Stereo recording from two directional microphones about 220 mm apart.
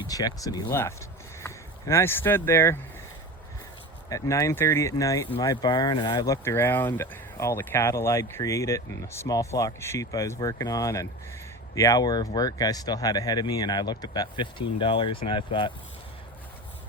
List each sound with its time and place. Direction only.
0.1 s speech: 15° left (ahead or behind)
4.1 s speech: 15° left (ahead or behind)